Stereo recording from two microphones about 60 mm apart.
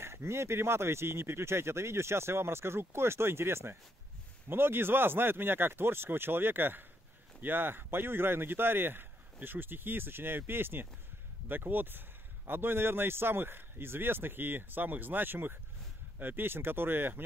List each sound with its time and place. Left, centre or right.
0.0 s speech: right